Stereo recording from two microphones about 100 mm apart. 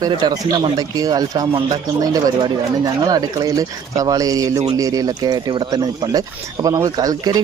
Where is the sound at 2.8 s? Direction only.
40° right (ahead or behind).